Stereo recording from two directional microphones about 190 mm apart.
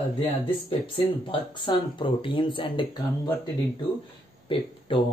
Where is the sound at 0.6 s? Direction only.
30° left (ahead or behind).